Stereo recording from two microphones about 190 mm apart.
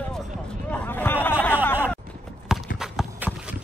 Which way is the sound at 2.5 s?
5° right (ahead or behind).